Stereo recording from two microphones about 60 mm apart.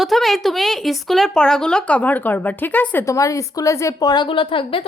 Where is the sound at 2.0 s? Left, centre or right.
Left.